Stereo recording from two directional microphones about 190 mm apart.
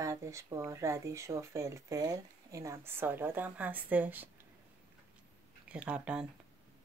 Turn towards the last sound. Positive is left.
turn(degrees=-5)  # may be behind; listen again after turning